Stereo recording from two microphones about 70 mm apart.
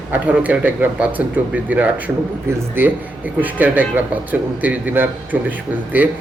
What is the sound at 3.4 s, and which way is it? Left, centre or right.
A man's voice, right.